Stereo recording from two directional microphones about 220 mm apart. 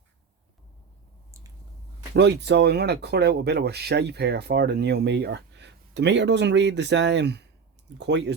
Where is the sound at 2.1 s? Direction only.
50° right (ahead or behind).